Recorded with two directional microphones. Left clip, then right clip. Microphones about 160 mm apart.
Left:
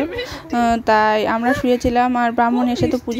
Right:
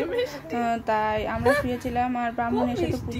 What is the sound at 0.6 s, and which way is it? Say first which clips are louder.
A woman's voice: left 10 dB; 55° left (ahead or behind).